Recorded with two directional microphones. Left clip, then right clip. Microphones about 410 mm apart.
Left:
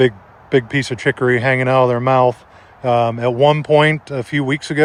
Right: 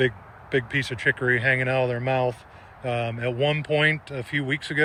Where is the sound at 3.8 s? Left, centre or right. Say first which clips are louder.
Left 6 dB; left.